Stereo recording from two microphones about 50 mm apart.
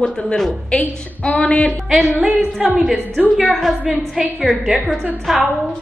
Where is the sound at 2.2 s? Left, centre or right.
Right.